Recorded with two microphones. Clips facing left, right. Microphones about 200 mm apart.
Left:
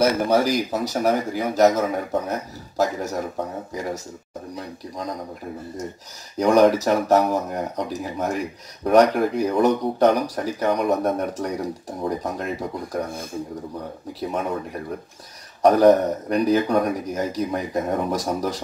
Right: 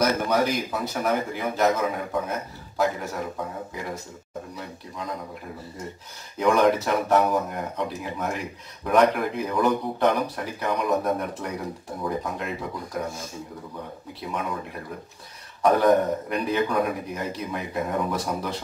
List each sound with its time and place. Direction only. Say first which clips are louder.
0.0 s a man's voice: left 4 dB; 30° left (ahead or behind)
6.3 s a man's voice: left 4 dB; 40° left (ahead or behind)
13.1 s speech: left 5 dB; 55° left (ahead or behind)
15.6 s a man's voice: left 4 dB; 40° left (ahead or behind)